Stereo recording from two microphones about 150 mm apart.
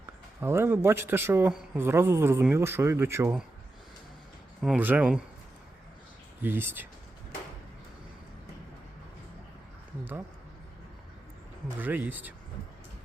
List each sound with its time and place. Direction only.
0.0 s a man's voice: 15° right (ahead or behind)
4.6 s a man's voice: 10° right (ahead or behind)
6.4 s a man's voice: 15° right (ahead or behind)
10.0 s a man's voice: 15° right (ahead or behind)
11.8 s a man's voice: 10° right (ahead or behind)